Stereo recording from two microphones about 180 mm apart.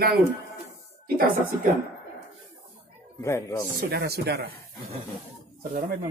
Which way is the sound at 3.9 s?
60° right (ahead or behind).